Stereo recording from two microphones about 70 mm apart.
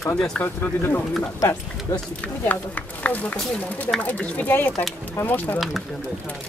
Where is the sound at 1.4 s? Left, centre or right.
Left.